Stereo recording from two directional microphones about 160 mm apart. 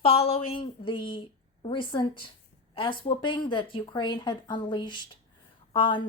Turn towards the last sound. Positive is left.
turn(degrees=30)  # may be behind; listen again after turning